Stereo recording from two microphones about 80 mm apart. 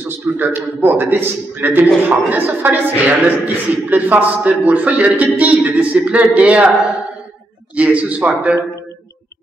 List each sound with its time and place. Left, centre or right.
0.0 s a man's voice: right
7.7 s a man's voice: centre